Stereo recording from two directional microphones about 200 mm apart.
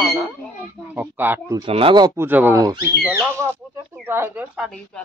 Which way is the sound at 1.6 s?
25° right (ahead or behind).